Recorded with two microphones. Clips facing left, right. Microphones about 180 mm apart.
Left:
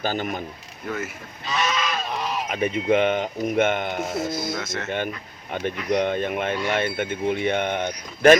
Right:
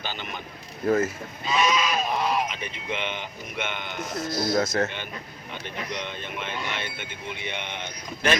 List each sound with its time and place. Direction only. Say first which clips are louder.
0.0 s speech: left 9 dB; 45° left (ahead or behind)
1.5 s goose: right 2 dB; 15° right (ahead or behind)
2.5 s speech: left 12 dB; 45° left (ahead or behind)
4.5 s speech: right 7 dB; 35° right (ahead or behind)
5.5 s speech: left 10 dB; 50° left (ahead or behind)